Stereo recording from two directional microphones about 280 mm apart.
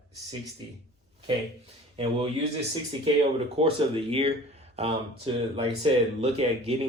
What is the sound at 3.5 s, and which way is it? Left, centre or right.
Speech, centre.